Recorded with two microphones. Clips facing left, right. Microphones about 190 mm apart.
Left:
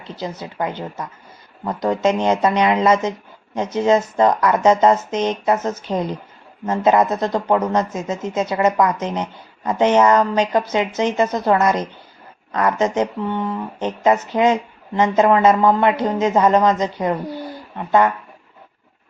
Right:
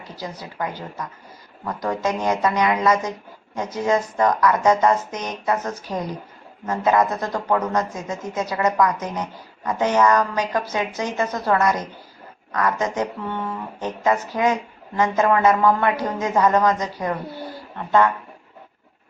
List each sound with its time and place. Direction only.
0.0 s speech: 25° left (ahead or behind)